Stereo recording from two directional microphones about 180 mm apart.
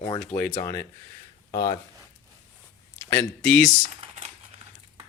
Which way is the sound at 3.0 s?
15° left (ahead or behind).